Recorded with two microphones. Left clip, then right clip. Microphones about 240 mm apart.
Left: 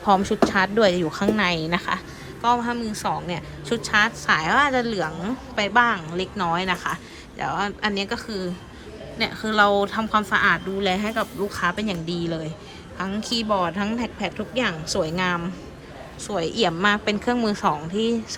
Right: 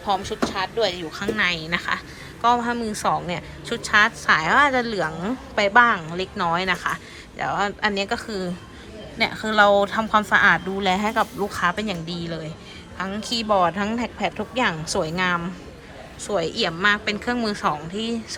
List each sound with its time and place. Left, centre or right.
1.1 s a woman's voice: left